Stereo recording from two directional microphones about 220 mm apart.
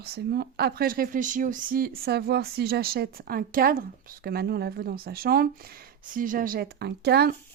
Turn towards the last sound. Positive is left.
turn(degrees=-45)  # may be behind; listen again after turning